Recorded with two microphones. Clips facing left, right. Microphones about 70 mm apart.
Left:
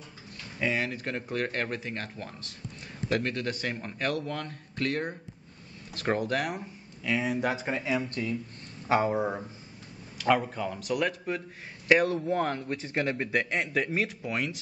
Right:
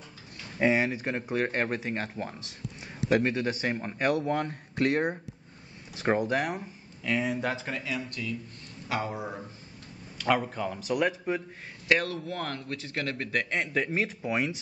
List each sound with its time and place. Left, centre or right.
0.7 s speech: centre
5.9 s speech: centre
7.6 s speech: left
10.1 s speech: centre
11.9 s a man's voice: centre